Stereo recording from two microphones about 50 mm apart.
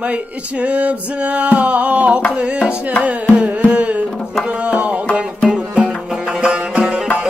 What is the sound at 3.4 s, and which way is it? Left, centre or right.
Carnatic music, right.